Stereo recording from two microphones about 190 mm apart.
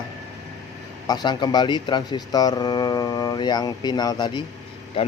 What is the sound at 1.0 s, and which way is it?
A man's voice, 20° left (ahead or behind).